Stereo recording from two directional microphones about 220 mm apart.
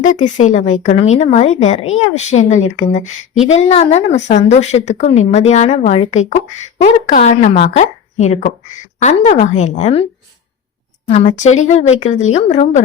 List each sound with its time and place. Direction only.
0.0 s speech: 35° left (ahead or behind)
11.1 s speech: 35° left (ahead or behind)